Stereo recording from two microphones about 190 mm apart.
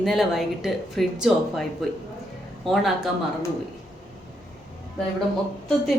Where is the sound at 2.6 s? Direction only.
Centre (ahead or behind).